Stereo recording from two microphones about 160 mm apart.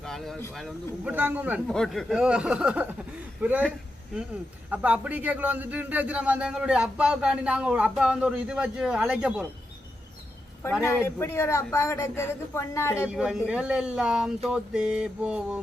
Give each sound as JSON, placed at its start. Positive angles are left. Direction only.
{"t": 0.0, "sound": "a sound", "side_deg": 0}
{"t": 0.5, "sound": "speech", "side_deg": 0}
{"t": 1.1, "sound": "a man's voice", "side_deg": -10}
{"t": 1.6, "sound": "speech", "side_deg": 5}
{"t": 4.7, "sound": "a man's voice", "side_deg": -10}
{"t": 10.8, "sound": "a woman's voice", "side_deg": 15}
{"t": 13.1, "sound": "speech", "side_deg": -5}